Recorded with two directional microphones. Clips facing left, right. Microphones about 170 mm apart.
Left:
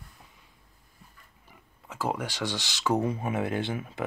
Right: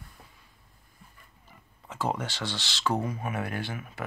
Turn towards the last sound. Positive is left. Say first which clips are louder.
# left 5 dB
turn(degrees=20)  # may be behind; listen again after turning